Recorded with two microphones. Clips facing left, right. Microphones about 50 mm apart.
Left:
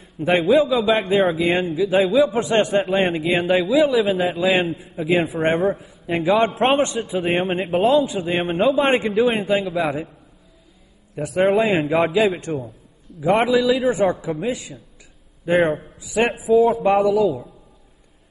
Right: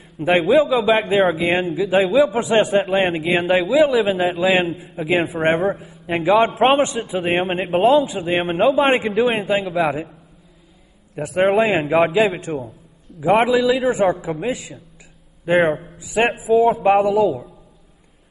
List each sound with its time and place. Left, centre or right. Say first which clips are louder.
0.2 s a man's voice: right 1 dB; centre
11.1 s a man's voice: right 1 dB; centre
17.1 s a man's voice: right 1 dB; centre